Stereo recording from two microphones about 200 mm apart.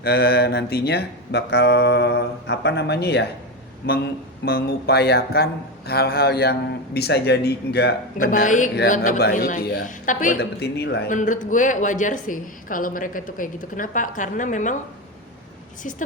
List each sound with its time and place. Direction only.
0.0 s a man's voice: 55° left (ahead or behind)
8.3 s a woman's voice: 40° left (ahead or behind)
10.6 s speech: 55° left (ahead or behind)
11.1 s a woman's voice: 40° left (ahead or behind)
15.8 s a woman's voice: 40° left (ahead or behind)